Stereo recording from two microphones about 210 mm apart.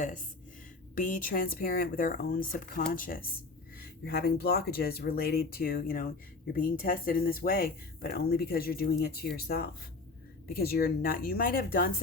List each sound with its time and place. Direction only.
0.9 s speech: 40° left (ahead or behind)